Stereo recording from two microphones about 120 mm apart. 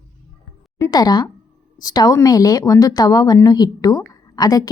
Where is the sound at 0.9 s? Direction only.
35° left (ahead or behind).